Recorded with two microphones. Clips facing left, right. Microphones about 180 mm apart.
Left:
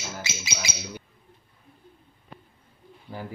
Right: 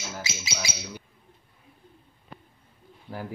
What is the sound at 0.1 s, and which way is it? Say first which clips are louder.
Bird: even; centre (ahead or behind).